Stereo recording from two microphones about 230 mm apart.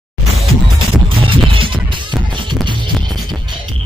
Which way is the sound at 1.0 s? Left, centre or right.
Right.